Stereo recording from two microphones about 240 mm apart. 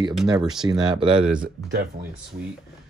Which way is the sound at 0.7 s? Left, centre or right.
Right.